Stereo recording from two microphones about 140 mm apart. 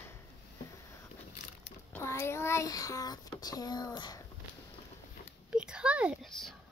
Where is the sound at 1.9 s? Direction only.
20° left (ahead or behind).